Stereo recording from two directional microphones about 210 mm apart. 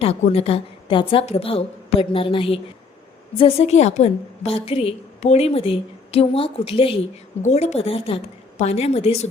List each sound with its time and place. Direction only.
0.0 s a woman's voice: 30° left (ahead or behind)